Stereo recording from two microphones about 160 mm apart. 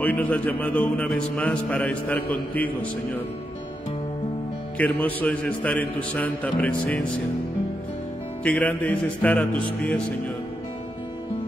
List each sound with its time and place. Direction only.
0.0 s speech: 10° left (ahead or behind)
4.7 s speech: 10° left (ahead or behind)
8.5 s speech: 10° left (ahead or behind)